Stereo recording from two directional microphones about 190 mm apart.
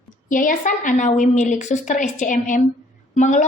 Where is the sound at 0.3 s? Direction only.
45° left (ahead or behind).